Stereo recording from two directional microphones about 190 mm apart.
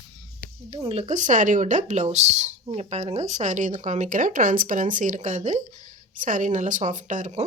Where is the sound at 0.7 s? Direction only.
30° right (ahead or behind).